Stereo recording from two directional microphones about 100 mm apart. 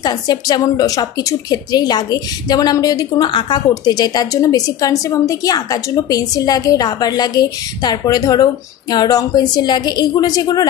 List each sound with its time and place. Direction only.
0.0 s a woman's voice: 40° left (ahead or behind)